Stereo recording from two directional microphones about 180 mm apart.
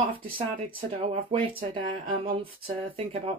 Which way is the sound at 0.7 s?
35° right (ahead or behind).